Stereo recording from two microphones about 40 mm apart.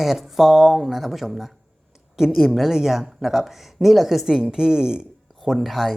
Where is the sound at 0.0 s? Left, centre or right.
Centre.